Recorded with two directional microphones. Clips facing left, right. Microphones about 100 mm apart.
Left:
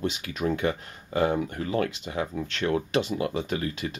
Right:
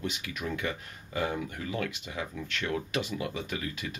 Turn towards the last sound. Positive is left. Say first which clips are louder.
# left 6 dB
turn(degrees=35)  # may be behind; listen again after turning